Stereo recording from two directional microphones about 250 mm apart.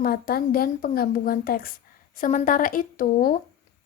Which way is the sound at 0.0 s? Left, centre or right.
Left.